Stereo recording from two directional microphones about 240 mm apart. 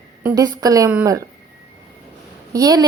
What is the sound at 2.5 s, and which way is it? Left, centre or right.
Speech, centre.